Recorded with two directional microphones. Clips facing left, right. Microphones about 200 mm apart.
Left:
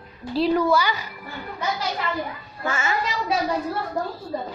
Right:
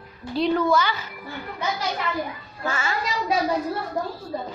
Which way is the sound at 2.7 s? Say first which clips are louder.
Left 2 dB; 25° left (ahead or behind).